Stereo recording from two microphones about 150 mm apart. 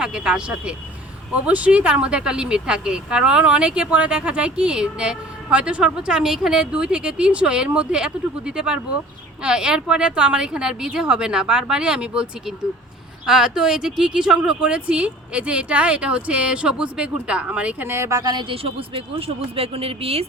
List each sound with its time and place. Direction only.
0.0 s speech: 5° right (ahead or behind); by 20.2 s 40° right (ahead or behind)